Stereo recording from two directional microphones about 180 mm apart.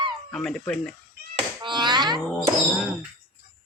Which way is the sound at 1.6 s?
25° right (ahead or behind).